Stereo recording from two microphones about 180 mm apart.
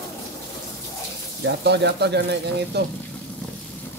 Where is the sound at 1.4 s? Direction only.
70° right (ahead or behind).